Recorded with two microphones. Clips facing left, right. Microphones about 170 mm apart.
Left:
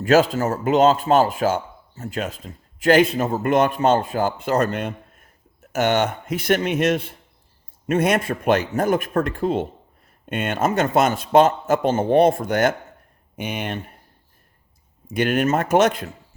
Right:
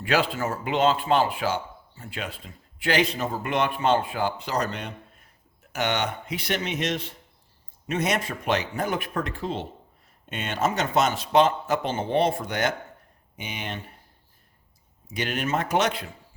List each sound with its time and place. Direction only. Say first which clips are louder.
0.0 s speech: left 8 dB; 45° left (ahead or behind)
15.0 s speech: left 9 dB; 50° left (ahead or behind)